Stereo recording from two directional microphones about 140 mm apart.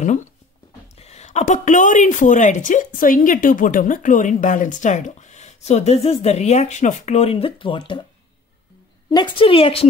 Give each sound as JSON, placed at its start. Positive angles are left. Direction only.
{"t": 0.9, "sound": "a woman's voice", "side_deg": 50}
{"t": 9.1, "sound": "a woman's voice", "side_deg": 35}